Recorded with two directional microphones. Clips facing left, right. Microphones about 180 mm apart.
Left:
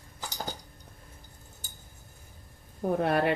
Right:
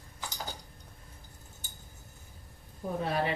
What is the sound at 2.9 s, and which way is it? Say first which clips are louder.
Speech: left 5 dB; 60° left (ahead or behind).